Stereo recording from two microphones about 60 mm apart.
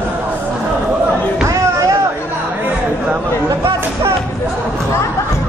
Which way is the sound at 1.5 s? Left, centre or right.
Right.